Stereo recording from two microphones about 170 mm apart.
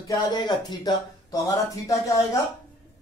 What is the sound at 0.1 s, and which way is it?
Speech, 20° left (ahead or behind).